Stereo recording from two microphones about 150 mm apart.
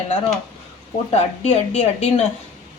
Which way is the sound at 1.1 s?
45° left (ahead or behind).